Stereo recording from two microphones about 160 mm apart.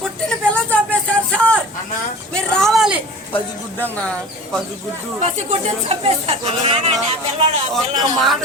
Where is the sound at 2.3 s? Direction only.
5° left (ahead or behind).